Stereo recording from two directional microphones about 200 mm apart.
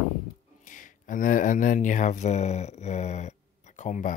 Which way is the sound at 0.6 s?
40° left (ahead or behind).